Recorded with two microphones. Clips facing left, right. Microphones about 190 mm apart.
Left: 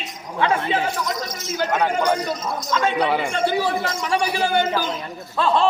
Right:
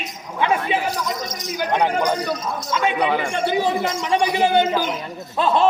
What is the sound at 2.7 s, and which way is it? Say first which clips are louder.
A man's voice: even; 15° right (ahead or behind).